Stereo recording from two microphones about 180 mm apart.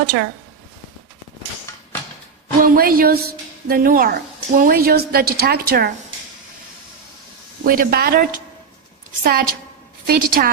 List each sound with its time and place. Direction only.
2.6 s a woman's voice: 55° right (ahead or behind)
7.6 s a woman's voice: 55° right (ahead or behind)
9.2 s a woman's voice: 55° right (ahead or behind)